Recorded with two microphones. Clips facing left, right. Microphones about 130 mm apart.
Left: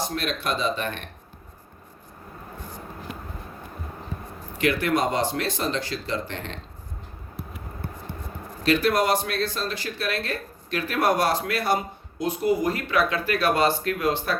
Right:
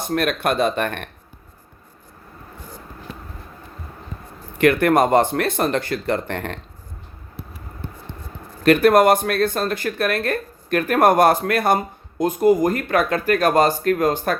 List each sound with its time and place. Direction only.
0.0 s speech: 55° right (ahead or behind)
4.5 s speech: 55° right (ahead or behind)
7.3 s a sound: 25° right (ahead or behind)
8.6 s speech: 55° right (ahead or behind)